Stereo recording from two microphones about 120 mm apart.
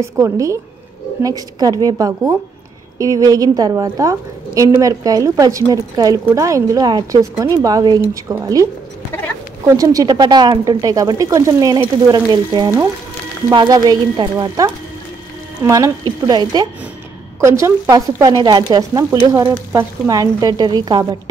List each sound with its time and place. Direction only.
0.0 s a woman's voice: 25° right (ahead or behind)
9.8 s speech: 30° right (ahead or behind)
15.6 s a woman's voice: 25° right (ahead or behind)
17.4 s speech: 25° right (ahead or behind)